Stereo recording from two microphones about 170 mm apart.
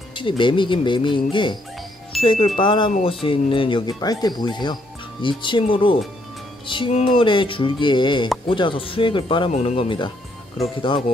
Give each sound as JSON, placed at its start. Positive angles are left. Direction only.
{"t": 0.1, "sound": "speech", "side_deg": 30}